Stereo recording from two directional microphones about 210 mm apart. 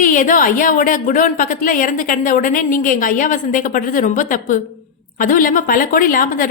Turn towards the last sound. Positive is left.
turn(degrees=40)  # may be behind; listen again after turning